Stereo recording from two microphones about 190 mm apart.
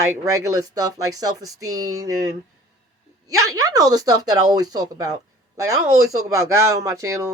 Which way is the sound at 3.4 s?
15° right (ahead or behind).